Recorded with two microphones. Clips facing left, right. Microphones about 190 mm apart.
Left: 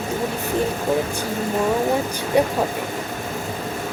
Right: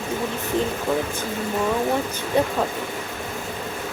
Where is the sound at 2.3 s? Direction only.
15° left (ahead or behind).